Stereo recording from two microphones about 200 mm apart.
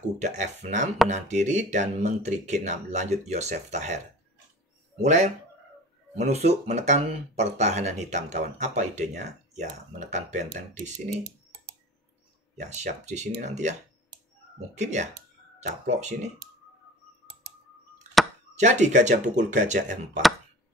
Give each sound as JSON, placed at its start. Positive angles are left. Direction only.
{"t": 0.2, "sound": "speech", "side_deg": -35}
{"t": 5.0, "sound": "speech", "side_deg": -35}
{"t": 12.5, "sound": "speech", "side_deg": -35}
{"t": 14.8, "sound": "speech", "side_deg": -35}
{"t": 18.5, "sound": "speech", "side_deg": -35}